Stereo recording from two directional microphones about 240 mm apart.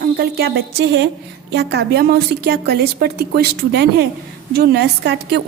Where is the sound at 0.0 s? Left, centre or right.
Right.